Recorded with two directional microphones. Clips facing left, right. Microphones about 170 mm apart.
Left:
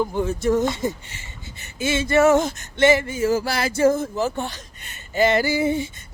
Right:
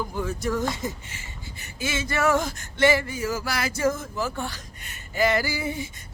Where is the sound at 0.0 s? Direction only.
25° left (ahead or behind).